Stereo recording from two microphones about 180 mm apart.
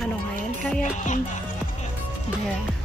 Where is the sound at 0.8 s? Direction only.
45° left (ahead or behind).